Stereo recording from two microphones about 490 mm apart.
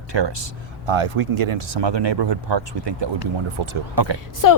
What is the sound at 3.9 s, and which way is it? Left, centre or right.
Speech, right.